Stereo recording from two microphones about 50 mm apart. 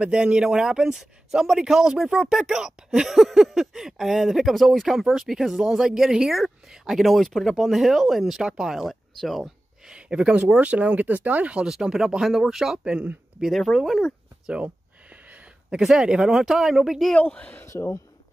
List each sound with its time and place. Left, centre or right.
0.0 s speech: centre
8.8 s speech: centre
9.4 s a sound: centre
10.4 s speech: right
11.6 s speech: centre
12.7 s speech: centre
13.5 s speech: centre
14.5 s a sound: right
15.8 s speech: centre
17.6 s speech: left